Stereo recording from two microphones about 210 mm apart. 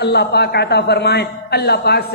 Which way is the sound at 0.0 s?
50° left (ahead or behind).